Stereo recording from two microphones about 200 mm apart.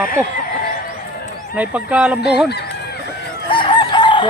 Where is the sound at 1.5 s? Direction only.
5° right (ahead or behind).